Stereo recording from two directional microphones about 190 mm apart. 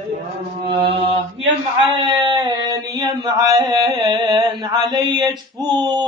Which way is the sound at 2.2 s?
25° right (ahead or behind).